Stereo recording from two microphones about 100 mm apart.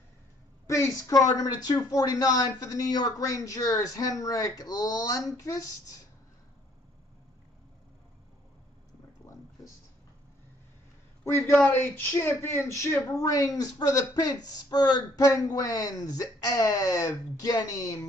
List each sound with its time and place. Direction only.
0.7 s speech: 30° left (ahead or behind)
11.2 s a man's voice: 25° left (ahead or behind)